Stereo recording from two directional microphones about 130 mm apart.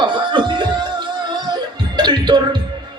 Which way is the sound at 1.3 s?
35° right (ahead or behind).